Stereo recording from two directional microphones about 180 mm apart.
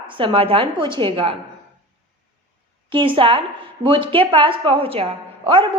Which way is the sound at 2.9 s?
30° right (ahead or behind).